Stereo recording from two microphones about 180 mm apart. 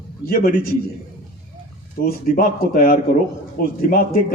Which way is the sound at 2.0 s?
50° left (ahead or behind).